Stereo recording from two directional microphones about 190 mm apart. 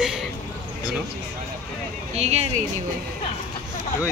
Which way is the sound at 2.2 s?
35° right (ahead or behind).